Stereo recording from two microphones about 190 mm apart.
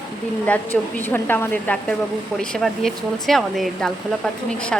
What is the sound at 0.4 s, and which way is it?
A woman's voice, 10° left (ahead or behind).